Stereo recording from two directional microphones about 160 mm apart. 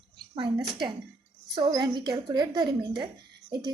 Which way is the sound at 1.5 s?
25° right (ahead or behind).